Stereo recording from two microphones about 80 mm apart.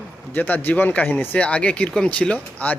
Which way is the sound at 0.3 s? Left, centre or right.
Left.